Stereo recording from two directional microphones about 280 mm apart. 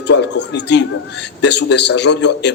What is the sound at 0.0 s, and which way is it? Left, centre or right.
A man's voice, left.